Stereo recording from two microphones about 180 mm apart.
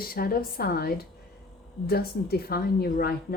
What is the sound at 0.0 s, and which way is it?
A woman's voice, 55° left (ahead or behind).